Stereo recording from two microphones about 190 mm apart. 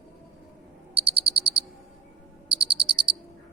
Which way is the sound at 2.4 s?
25° right (ahead or behind).